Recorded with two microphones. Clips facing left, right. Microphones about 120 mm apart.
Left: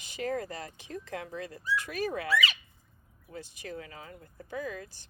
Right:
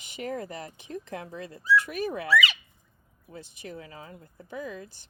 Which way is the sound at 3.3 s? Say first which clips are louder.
Even; 25° right (ahead or behind).